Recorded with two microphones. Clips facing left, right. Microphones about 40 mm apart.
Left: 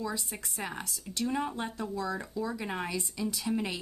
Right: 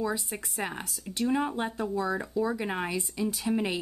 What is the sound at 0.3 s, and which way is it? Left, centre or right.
Speech, centre.